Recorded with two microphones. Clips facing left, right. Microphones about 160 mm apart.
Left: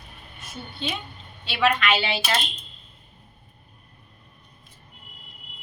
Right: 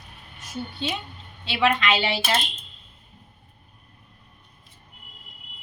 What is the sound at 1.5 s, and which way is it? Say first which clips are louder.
Speech: even; 25° right (ahead or behind).